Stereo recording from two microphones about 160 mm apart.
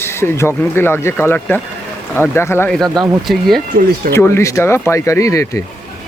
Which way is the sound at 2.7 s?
Centre (ahead or behind).